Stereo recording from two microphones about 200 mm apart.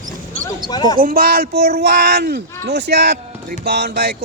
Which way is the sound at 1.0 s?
45° right (ahead or behind).